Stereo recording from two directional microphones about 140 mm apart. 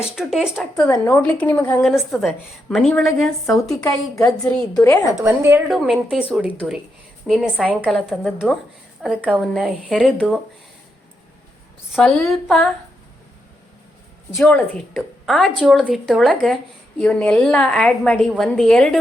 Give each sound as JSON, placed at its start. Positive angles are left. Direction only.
{"t": 0.0, "sound": "a woman's voice", "side_deg": 0}
{"t": 0.9, "sound": "speech", "side_deg": 25}
{"t": 1.1, "sound": "a woman's voice", "side_deg": 10}
{"t": 4.8, "sound": "speech", "side_deg": 20}
{"t": 5.2, "sound": "a woman's voice", "side_deg": -15}
{"t": 5.7, "sound": "a woman's voice", "side_deg": -5}
{"t": 9.0, "sound": "a woman's voice", "side_deg": -10}
{"t": 9.4, "sound": "a woman's voice", "side_deg": 0}
{"t": 11.9, "sound": "a woman's voice", "side_deg": 0}
{"t": 14.9, "sound": "a woman's voice", "side_deg": 0}